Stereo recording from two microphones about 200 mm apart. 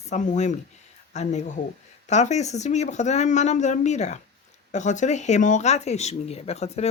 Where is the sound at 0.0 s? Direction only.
35° left (ahead or behind).